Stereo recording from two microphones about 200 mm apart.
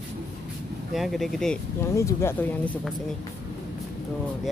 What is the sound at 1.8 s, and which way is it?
Speech, 15° left (ahead or behind).